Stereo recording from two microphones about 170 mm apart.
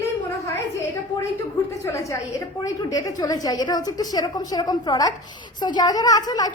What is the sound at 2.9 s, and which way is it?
A woman's voice, 25° left (ahead or behind).